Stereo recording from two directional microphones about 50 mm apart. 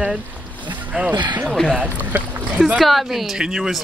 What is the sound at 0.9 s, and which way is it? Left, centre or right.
Speech, right.